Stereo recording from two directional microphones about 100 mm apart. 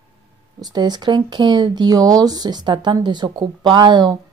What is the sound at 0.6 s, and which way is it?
A woman's voice, 45° right (ahead or behind).